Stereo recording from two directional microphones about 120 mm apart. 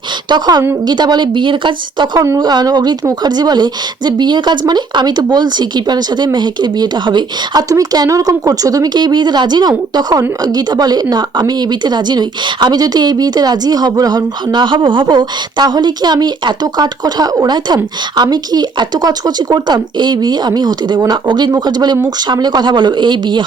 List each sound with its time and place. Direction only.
0.3 s speech: 35° right (ahead or behind)